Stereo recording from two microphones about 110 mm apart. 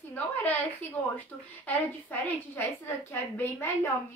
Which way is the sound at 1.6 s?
20° left (ahead or behind).